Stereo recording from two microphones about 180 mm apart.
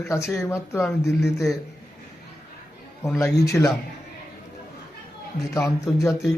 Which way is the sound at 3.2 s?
15° left (ahead or behind).